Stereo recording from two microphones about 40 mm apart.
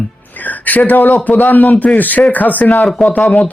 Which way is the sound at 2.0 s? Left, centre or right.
Left.